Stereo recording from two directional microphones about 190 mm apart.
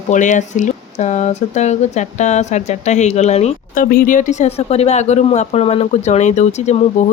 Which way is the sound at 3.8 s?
45° left (ahead or behind).